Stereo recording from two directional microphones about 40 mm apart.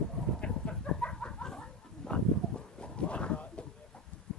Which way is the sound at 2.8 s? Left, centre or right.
Left.